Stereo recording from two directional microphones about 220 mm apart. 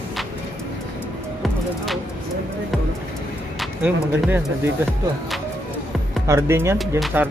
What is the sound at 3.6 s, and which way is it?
Speech, 5° right (ahead or behind).